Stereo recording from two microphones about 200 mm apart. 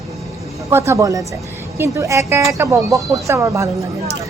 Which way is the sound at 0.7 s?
15° right (ahead or behind).